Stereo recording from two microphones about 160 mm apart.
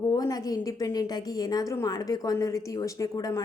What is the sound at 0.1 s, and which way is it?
A woman's voice, 25° left (ahead or behind).